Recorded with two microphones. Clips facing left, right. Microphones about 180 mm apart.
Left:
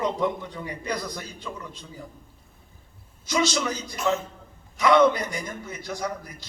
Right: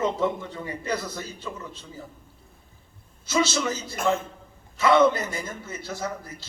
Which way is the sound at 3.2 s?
15° left (ahead or behind).